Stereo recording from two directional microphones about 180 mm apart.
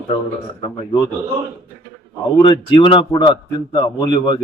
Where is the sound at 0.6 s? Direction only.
25° left (ahead or behind).